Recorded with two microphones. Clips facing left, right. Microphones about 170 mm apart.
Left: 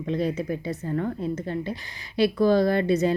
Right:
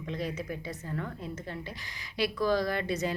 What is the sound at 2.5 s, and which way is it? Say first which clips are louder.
Speech: left 8 dB; 30° left (ahead or behind).